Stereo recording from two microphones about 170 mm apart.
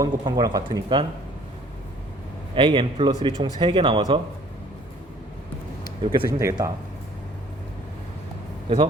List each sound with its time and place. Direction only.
0.0 s speech: 25° right (ahead or behind)
2.6 s speech: 30° right (ahead or behind)
6.0 s speech: 25° right (ahead or behind)